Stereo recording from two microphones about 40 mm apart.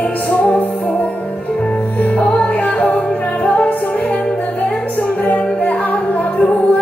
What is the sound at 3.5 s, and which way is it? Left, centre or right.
Music, left.